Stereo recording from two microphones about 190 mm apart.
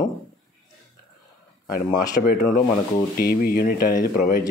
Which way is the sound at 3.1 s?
50° left (ahead or behind).